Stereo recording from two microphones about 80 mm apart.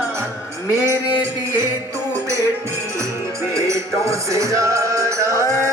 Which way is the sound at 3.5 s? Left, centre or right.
Right.